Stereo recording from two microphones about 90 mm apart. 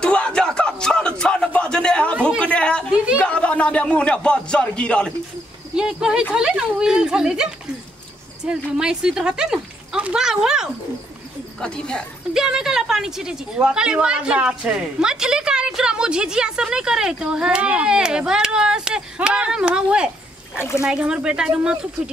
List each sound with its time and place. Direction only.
0.0 s a sound: 10° left (ahead or behind)
3.2 s speech: 15° left (ahead or behind)
5.8 s a woman's voice: 10° right (ahead or behind)
8.5 s a woman's voice: 10° right (ahead or behind)
11.6 s speech: 10° left (ahead or behind)
12.4 s a woman's voice: 5° right (ahead or behind)
20.5 s speech: 30° left (ahead or behind)
20.8 s a woman's voice: 10° right (ahead or behind)